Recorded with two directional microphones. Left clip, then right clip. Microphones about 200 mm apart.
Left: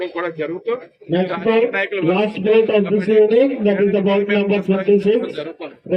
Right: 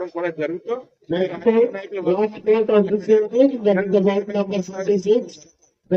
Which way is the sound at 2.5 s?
30° right (ahead or behind).